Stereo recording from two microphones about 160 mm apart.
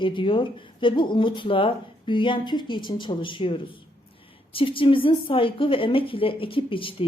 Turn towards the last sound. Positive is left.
turn(degrees=35)  # may be behind; listen again after turning